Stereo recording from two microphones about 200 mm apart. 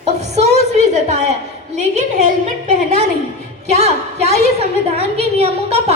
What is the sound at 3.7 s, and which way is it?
A woman's voice, 35° right (ahead or behind).